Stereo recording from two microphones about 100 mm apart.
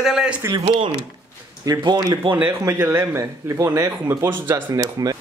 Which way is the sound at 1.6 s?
40° right (ahead or behind).